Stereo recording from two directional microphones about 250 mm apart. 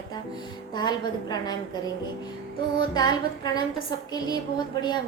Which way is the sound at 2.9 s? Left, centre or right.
Centre.